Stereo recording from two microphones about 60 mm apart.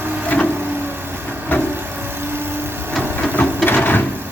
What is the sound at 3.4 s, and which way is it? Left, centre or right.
Printer, left.